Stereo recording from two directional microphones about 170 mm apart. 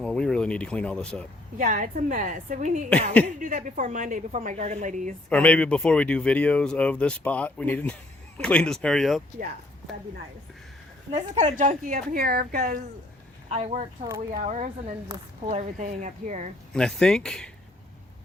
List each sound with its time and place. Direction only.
0.0 s speech: 5° left (ahead or behind)
1.5 s a woman's voice: 50° right (ahead or behind)
5.3 s speech: 5° left (ahead or behind)
11.3 s a woman's voice: 45° right (ahead or behind)
13.5 s a woman's voice: 40° right (ahead or behind)
16.7 s speech: 5° left (ahead or behind)